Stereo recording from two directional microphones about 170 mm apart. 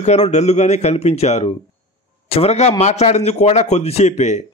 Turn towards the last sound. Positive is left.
turn(degrees=40)  # may be behind; listen again after turning